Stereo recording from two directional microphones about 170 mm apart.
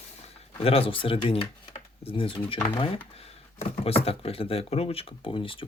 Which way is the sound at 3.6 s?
35° left (ahead or behind).